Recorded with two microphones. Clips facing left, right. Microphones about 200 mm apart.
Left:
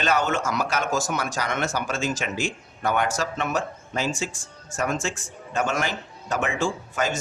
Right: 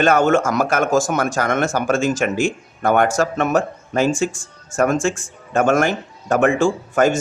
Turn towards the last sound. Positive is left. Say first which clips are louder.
# right 10 dB
turn(degrees=-50)  # may be behind; listen again after turning